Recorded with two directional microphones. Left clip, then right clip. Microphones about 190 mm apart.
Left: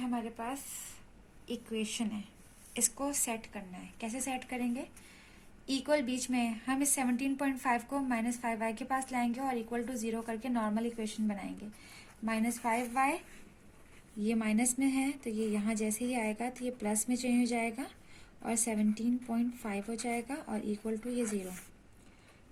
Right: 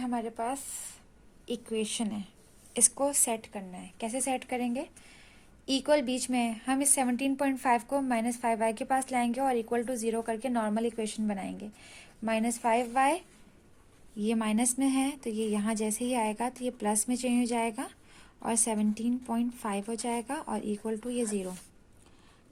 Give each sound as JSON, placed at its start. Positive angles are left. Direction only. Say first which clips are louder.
{"t": 0.0, "sound": "a woman's voice", "louder": "right 5 dB", "side_deg": -50}
{"t": 14.2, "sound": "a woman's voice", "louder": "right 3 dB", "side_deg": -45}